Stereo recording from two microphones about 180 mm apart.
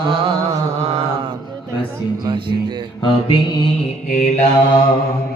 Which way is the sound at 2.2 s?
30° right (ahead or behind).